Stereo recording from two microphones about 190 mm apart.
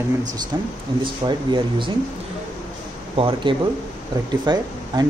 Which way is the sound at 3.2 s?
25° right (ahead or behind).